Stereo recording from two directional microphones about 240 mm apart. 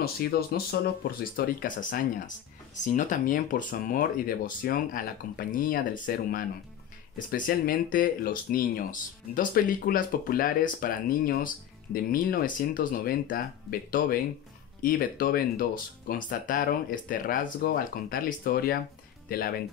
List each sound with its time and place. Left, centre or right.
0.0 s speech: left